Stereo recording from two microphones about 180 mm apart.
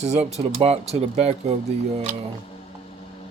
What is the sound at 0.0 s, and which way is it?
Speech, 35° right (ahead or behind).